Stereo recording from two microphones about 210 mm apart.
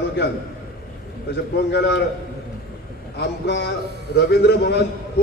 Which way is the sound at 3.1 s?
55° left (ahead or behind).